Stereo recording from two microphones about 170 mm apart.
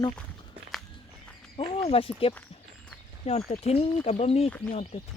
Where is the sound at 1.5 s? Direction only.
35° left (ahead or behind).